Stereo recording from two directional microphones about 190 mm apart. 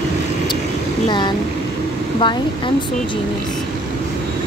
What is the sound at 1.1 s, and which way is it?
Vehicle, 25° left (ahead or behind).